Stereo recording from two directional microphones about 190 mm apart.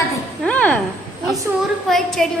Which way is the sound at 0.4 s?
5° left (ahead or behind).